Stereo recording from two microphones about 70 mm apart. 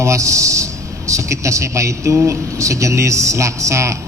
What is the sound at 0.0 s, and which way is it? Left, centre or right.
A man's voice, right.